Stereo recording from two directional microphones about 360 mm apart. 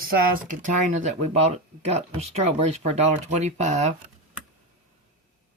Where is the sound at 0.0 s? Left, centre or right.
Right.